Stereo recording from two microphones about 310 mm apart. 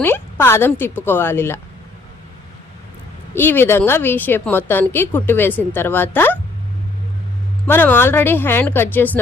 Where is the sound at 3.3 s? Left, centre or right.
Centre.